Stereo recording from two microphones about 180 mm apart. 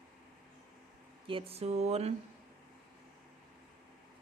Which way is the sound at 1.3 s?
30° right (ahead or behind).